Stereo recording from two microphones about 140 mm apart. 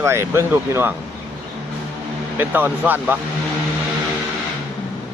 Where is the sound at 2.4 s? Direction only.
15° right (ahead or behind).